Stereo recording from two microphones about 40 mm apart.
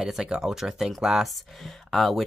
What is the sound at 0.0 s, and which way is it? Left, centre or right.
Speech, centre.